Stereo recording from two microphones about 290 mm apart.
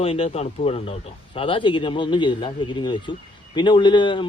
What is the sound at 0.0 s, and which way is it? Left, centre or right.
Speech, centre.